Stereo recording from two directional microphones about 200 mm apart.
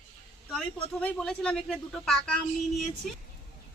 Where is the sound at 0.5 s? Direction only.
5° left (ahead or behind).